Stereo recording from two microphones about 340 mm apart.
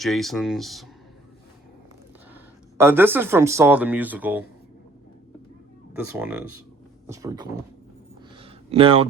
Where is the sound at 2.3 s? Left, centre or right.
Centre.